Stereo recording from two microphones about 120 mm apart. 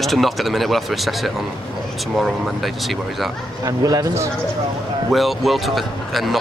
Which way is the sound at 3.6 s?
30° right (ahead or behind).